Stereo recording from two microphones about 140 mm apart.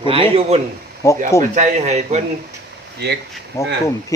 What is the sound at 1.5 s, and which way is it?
Speech, 55° right (ahead or behind).